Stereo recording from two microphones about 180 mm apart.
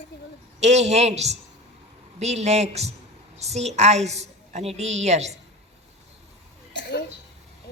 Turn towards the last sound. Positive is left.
turn(degrees=75)  # may be behind; listen again after turning